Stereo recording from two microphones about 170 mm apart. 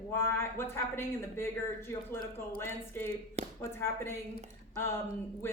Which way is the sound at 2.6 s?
15° left (ahead or behind).